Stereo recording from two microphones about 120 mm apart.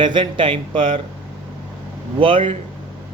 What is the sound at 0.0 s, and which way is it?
Speech, 40° right (ahead or behind).